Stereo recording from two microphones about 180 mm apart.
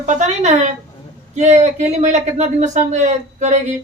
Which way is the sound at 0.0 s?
40° right (ahead or behind).